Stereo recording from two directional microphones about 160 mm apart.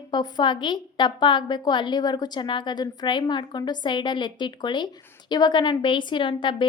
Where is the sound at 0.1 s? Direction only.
25° left (ahead or behind).